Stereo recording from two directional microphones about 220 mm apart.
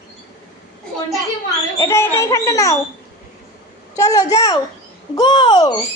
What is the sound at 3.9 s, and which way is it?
A child's voice, 15° left (ahead or behind).